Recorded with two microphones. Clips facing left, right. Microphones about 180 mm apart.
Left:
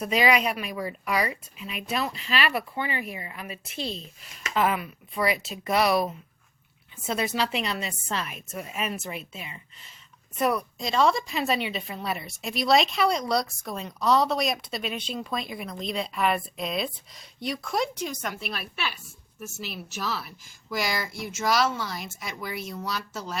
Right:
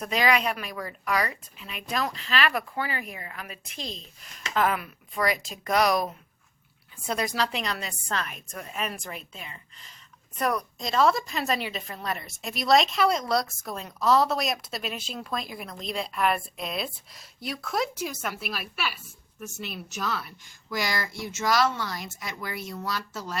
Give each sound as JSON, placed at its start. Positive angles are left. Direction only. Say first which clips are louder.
{"t": 0.0, "sound": "a woman's voice", "louder": "left 2 dB", "side_deg": 10}
{"t": 3.8, "sound": "speech", "louder": "left 4 dB", "side_deg": 35}
{"t": 4.5, "sound": "speech", "louder": "left 1 dB", "side_deg": 5}